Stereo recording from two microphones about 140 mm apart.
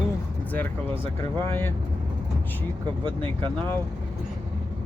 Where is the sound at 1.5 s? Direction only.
15° left (ahead or behind).